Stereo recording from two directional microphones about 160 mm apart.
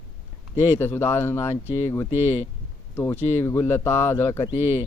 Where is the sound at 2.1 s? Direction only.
45° left (ahead or behind).